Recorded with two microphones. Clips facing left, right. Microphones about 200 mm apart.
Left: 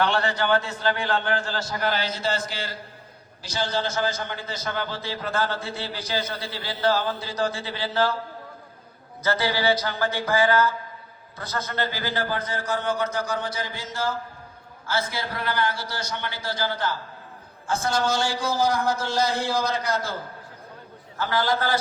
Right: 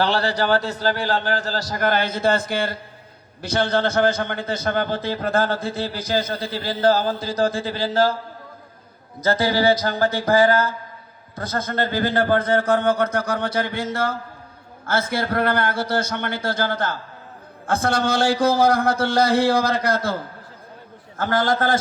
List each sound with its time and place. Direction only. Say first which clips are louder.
0.0 s a man's voice: right 3 dB; 35° right (ahead or behind)
9.2 s a man's voice: right 5 dB; 45° right (ahead or behind)
21.2 s a man's voice: right 4 dB; 45° right (ahead or behind)